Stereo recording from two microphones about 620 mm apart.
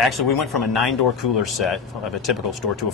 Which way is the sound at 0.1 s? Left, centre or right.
Left.